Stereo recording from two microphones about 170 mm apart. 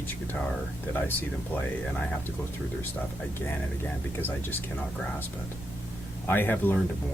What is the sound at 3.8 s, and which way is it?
Speech, 10° left (ahead or behind).